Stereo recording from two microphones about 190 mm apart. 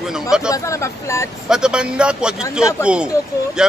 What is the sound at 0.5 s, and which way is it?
Speech, 15° left (ahead or behind).